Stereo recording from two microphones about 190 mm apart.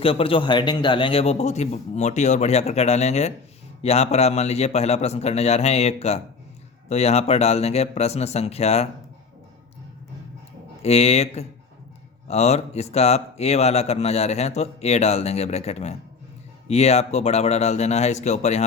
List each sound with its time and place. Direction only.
0.0 s speech: 30° left (ahead or behind)
10.8 s speech: 35° left (ahead or behind)